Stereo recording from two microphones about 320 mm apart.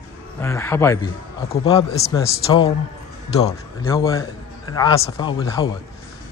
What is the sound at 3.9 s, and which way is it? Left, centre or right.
A man's voice, centre.